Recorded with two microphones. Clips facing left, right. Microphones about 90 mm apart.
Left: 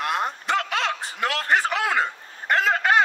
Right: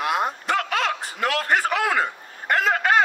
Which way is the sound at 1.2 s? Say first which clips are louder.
Right 1 dB; 30° right (ahead or behind).